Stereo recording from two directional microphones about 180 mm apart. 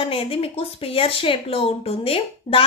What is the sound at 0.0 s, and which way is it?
A woman's voice, 30° left (ahead or behind).